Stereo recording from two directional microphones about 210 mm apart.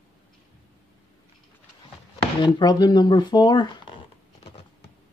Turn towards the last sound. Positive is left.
turn(degrees=20)  # may be behind; listen again after turning